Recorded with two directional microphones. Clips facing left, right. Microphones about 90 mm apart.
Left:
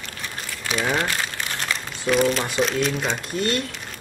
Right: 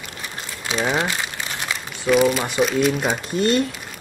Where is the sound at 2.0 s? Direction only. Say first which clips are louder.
Right 3 dB; 5° right (ahead or behind).